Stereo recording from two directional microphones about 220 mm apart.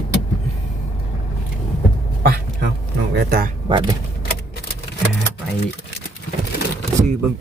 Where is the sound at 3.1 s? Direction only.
45° right (ahead or behind).